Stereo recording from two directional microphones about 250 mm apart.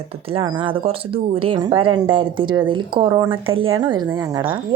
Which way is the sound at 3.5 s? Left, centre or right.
Right.